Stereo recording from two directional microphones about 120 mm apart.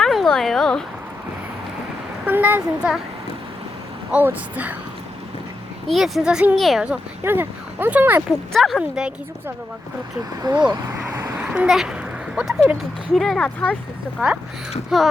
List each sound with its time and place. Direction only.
0.0 s a sound: centre (ahead or behind)
2.2 s speech: 15° right (ahead or behind)
4.1 s speech: 15° right (ahead or behind)
5.9 s speech: centre (ahead or behind)
7.3 s speech: 15° right (ahead or behind)
8.5 s speech: centre (ahead or behind)
10.4 s speech: 35° right (ahead or behind)
11.1 s a sound: 20° right (ahead or behind)
11.4 s speech: 10° right (ahead or behind); by 13.7 s 10° left (ahead or behind)
14.2 s speech: 10° right (ahead or behind)